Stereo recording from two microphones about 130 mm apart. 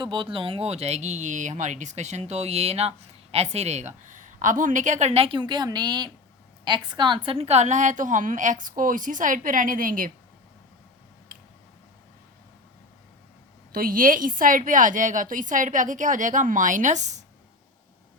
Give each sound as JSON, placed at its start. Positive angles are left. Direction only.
{"t": 0.0, "sound": "a woman's voice", "side_deg": -40}
{"t": 7.3, "sound": "a woman's voice", "side_deg": -50}
{"t": 13.7, "sound": "a woman's voice", "side_deg": -90}